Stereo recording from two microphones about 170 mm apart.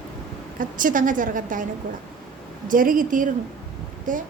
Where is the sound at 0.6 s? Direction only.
50° right (ahead or behind).